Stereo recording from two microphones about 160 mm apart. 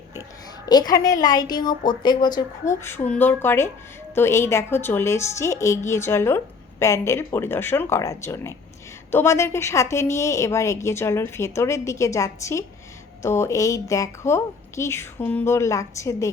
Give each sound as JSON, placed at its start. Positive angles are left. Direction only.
{"t": 0.6, "sound": "a woman's voice", "side_deg": 25}
{"t": 2.8, "sound": "a woman's voice", "side_deg": 15}